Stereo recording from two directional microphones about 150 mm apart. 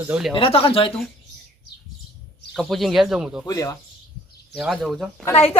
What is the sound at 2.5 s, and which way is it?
Speech, centre (ahead or behind).